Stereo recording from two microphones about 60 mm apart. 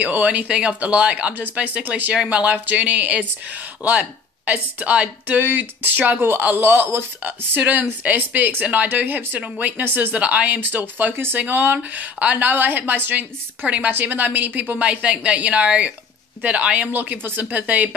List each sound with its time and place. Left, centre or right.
0.0 s a woman's voice: right
5.4 s speech: right
7.2 s a woman's voice: right
16.9 s a woman's voice: right